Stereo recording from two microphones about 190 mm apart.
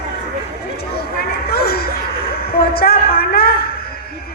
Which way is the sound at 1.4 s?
55° left (ahead or behind).